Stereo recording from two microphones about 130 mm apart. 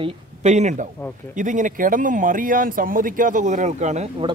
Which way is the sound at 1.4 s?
75° right (ahead or behind).